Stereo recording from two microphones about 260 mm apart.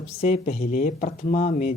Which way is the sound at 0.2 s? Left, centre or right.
Left.